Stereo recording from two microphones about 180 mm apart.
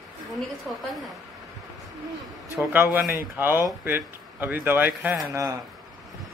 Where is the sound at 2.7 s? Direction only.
10° right (ahead or behind).